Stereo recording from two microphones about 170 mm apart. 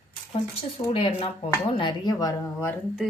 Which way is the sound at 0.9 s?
35° left (ahead or behind).